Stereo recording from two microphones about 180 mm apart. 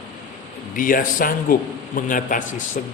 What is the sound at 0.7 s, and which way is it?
Speech, 50° left (ahead or behind).